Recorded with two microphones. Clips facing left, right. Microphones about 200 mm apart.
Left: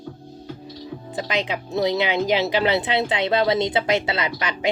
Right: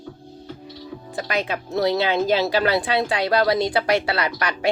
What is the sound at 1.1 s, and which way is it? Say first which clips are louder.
Speech: even; 20° left (ahead or behind).